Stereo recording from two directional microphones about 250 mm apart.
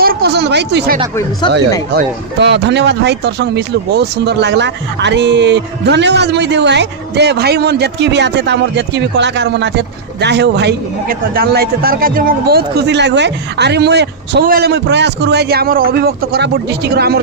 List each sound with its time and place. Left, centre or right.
0.0 s speech: right
2.0 s speech: right